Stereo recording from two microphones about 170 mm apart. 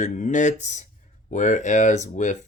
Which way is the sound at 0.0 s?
45° left (ahead or behind).